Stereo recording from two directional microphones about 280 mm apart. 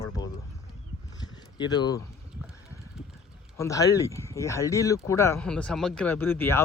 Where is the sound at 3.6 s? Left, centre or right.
Centre.